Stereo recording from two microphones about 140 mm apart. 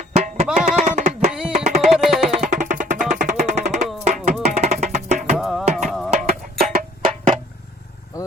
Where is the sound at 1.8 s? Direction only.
5° right (ahead or behind).